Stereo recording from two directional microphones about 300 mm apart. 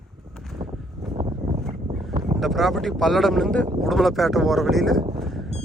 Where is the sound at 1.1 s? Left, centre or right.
Centre.